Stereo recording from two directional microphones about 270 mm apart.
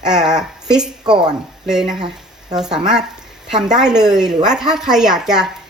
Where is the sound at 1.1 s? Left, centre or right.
Centre.